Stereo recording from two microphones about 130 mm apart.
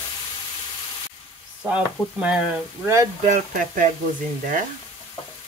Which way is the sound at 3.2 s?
80° right.